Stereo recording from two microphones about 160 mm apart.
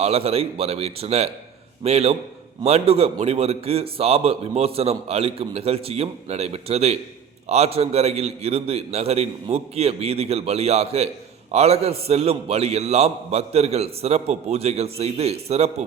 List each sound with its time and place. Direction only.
0.0 s a man's voice: 40° right (ahead or behind)